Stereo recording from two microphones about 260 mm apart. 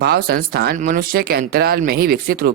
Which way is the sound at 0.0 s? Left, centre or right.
Right.